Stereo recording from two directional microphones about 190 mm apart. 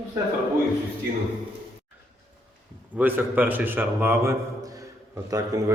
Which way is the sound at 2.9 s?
10° right (ahead or behind).